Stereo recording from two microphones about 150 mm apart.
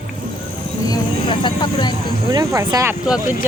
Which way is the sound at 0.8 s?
30° left (ahead or behind).